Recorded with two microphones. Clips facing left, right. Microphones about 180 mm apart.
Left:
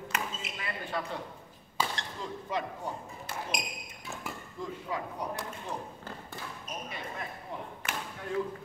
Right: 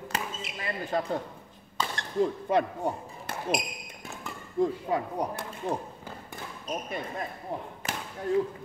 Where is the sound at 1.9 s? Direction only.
55° right (ahead or behind).